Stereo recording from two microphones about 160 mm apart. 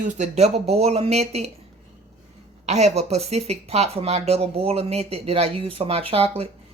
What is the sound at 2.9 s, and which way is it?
Speech, 40° right (ahead or behind).